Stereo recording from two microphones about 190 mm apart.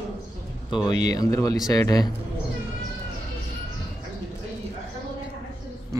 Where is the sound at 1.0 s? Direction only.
20° left (ahead or behind).